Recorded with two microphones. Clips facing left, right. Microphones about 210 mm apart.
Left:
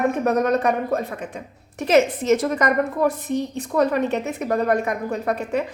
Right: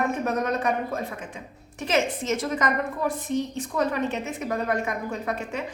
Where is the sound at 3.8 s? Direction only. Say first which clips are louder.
Left 6 dB; 60° left (ahead or behind).